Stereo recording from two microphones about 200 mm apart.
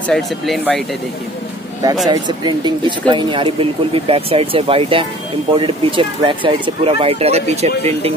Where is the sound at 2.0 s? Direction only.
20° right (ahead or behind).